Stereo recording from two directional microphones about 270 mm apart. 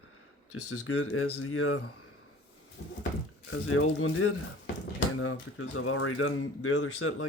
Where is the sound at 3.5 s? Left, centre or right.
Left.